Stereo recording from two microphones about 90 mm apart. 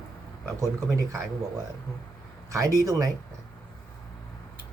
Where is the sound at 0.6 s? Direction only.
40° right (ahead or behind).